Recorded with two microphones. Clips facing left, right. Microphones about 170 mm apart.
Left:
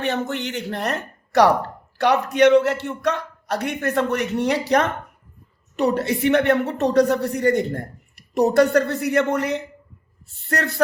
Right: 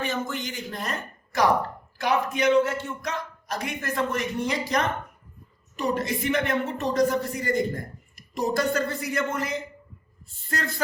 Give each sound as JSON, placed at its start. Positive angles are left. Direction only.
{"t": 0.0, "sound": "a woman's voice", "side_deg": 70}